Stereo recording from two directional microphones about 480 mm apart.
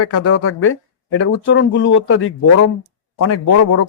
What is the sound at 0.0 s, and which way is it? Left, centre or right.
Speech, left.